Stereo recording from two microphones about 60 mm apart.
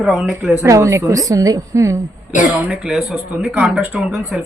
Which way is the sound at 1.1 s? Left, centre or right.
Right.